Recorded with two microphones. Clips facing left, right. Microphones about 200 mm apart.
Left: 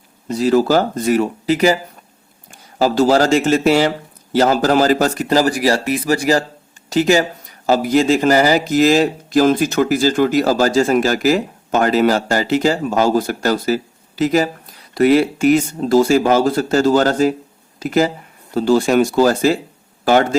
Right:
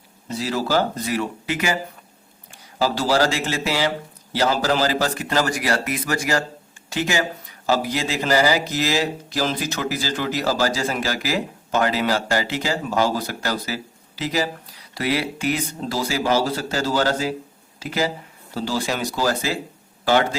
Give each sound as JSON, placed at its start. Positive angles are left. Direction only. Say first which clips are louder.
{"t": 0.3, "sound": "speech", "louder": "left 9 dB", "side_deg": 50}